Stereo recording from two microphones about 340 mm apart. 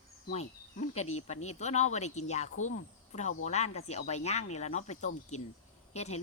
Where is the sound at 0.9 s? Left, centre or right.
Centre.